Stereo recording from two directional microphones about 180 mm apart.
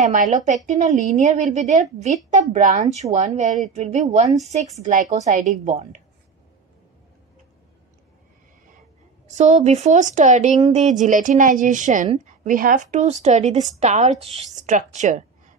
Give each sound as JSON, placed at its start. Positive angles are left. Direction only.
{"t": 0.0, "sound": "a woman's voice", "side_deg": -45}
{"t": 9.3, "sound": "a woman's voice", "side_deg": -40}